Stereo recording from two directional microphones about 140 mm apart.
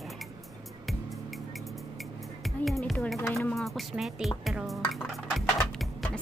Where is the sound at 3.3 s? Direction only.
Centre (ahead or behind).